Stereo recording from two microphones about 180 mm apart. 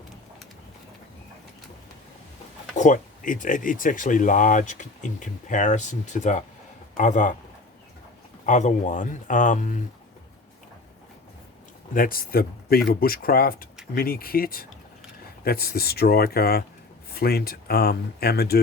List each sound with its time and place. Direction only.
2.7 s speech: 45° left (ahead or behind)
8.4 s speech: 40° left (ahead or behind)
11.9 s speech: 55° left (ahead or behind)